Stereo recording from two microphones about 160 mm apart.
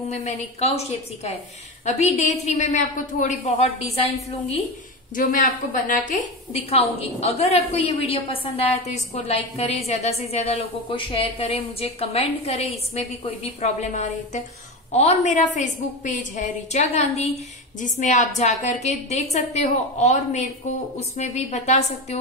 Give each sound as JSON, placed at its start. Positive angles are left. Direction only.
{"t": 0.1, "sound": "a woman's voice", "side_deg": 45}
{"t": 5.1, "sound": "a woman's voice", "side_deg": 60}